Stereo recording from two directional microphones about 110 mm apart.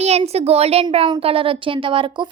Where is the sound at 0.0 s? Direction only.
75° right (ahead or behind).